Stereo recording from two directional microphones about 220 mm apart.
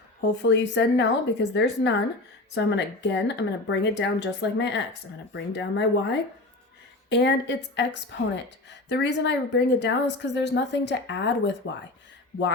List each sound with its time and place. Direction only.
0.2 s a woman's voice: 55° left (ahead or behind)